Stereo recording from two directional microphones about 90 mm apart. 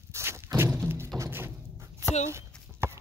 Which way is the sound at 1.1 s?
30° right (ahead or behind).